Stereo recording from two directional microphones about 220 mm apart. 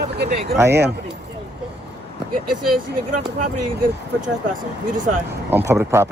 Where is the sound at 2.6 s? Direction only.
90° right.